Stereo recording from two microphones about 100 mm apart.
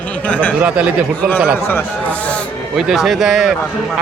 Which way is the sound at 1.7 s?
20° left (ahead or behind).